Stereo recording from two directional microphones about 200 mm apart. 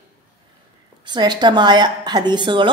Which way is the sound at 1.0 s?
20° right (ahead or behind).